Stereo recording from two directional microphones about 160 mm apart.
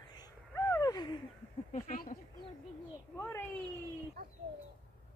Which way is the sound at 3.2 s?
10° left (ahead or behind).